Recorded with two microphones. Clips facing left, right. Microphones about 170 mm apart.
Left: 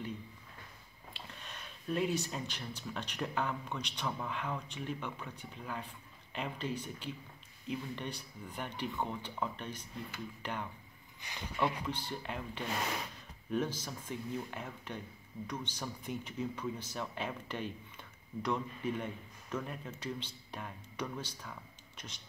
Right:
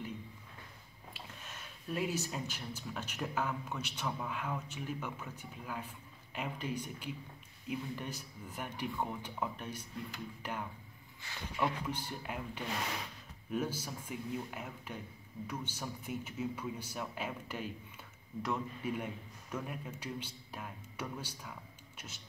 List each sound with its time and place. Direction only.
1.1 s a man's voice: 5° right (ahead or behind)
11.1 s speech: 15° left (ahead or behind)
11.8 s a man's voice: 10° right (ahead or behind)